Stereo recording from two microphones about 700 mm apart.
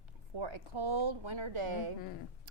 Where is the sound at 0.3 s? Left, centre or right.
Right.